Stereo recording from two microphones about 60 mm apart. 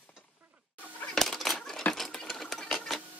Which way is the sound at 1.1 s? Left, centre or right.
Centre.